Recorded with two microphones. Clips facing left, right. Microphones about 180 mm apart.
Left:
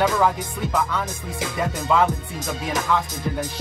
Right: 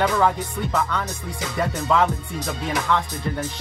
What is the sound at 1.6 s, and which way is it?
Music, 5° left (ahead or behind).